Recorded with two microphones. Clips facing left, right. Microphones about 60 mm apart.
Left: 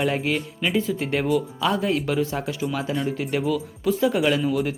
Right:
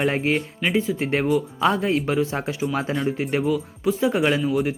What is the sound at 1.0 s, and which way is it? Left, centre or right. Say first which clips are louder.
Speech: right 1 dB; right.